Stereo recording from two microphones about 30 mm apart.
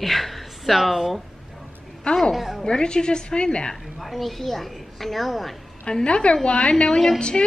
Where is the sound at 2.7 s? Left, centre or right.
Left.